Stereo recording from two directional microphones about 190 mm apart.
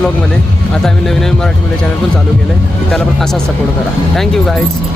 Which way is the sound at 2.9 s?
Centre (ahead or behind).